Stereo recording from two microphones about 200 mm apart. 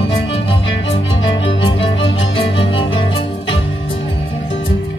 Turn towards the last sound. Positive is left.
turn(degrees=25)  # may be behind; listen again after turning